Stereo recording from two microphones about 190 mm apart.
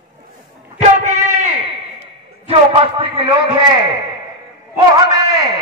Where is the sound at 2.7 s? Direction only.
25° right (ahead or behind).